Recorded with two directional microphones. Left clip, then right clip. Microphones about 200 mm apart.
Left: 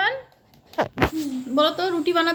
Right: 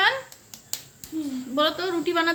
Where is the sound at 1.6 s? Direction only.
35° left (ahead or behind).